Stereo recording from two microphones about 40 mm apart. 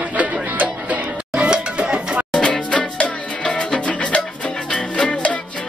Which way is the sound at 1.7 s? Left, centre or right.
Right.